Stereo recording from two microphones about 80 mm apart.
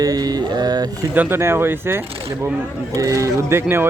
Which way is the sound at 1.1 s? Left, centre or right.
Right.